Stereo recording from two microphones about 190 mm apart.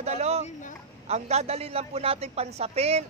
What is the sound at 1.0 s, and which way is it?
A man's voice, 35° right (ahead or behind).